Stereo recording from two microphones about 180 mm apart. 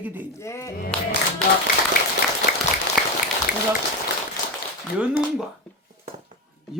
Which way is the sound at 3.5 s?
50° left (ahead or behind).